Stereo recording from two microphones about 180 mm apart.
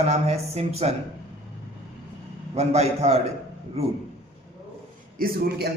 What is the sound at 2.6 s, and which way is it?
Speech, 35° right (ahead or behind).